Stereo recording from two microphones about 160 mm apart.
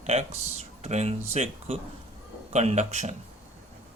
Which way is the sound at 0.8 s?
45° right (ahead or behind).